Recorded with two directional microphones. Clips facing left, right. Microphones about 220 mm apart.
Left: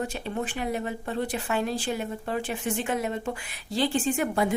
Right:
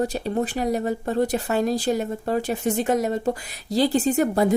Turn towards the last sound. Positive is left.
turn(degrees=-40)  # may be behind; listen again after turning